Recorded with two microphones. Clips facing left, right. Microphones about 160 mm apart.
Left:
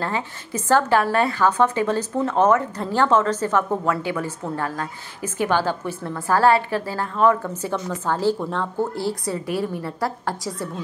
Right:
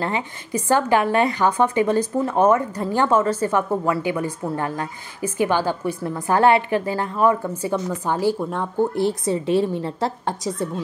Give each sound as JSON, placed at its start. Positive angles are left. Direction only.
{"t": 0.0, "sound": "a woman's voice", "side_deg": -15}